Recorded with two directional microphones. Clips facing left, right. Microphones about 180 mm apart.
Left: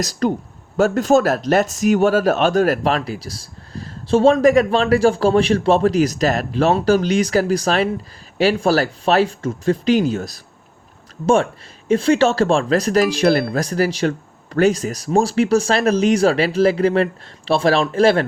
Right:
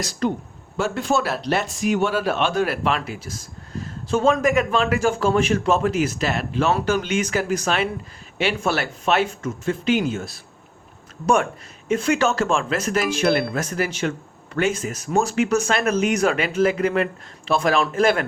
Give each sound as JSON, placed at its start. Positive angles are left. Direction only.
{"t": 0.0, "sound": "speech", "side_deg": 40}
{"t": 11.9, "sound": "speech", "side_deg": 30}